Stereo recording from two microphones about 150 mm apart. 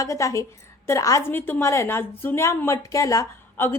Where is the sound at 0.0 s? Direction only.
20° left (ahead or behind).